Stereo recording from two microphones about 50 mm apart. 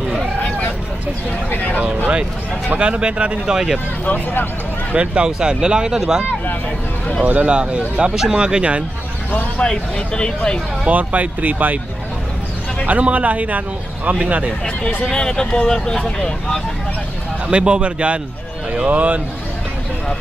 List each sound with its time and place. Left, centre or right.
1.5 s a sound: left
2.8 s speech: right
4.0 s speech: left
4.9 s speech: centre
7.2 s speech: right
9.6 s speech: centre
10.9 s speech: right
12.8 s speech: right
15.0 s speech: centre
17.5 s speech: right